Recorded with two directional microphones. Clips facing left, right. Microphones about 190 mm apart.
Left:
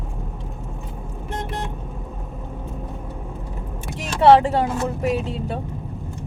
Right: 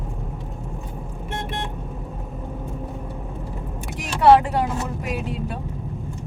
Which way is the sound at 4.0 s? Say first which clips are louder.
Left 1 dB; 25° left (ahead or behind).